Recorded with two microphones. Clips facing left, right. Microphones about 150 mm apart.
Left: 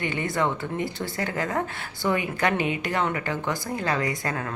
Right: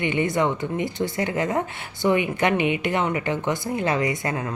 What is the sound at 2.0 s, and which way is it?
Speech, 10° right (ahead or behind).